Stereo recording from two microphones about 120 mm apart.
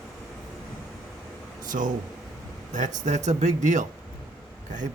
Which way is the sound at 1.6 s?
90° right.